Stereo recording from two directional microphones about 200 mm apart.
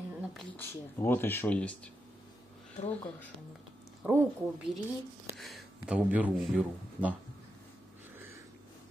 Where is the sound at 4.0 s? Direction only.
10° right (ahead or behind).